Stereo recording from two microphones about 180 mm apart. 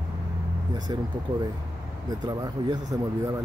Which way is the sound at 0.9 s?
25° right (ahead or behind).